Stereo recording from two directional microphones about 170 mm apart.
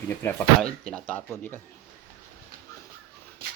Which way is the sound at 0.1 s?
10° left (ahead or behind).